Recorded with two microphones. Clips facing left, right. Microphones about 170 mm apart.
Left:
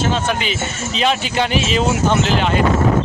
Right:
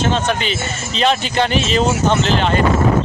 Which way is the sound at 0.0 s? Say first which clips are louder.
Right 1 dB; 5° left (ahead or behind).